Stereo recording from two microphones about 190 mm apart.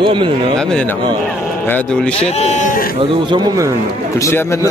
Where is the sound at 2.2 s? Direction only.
35° left (ahead or behind).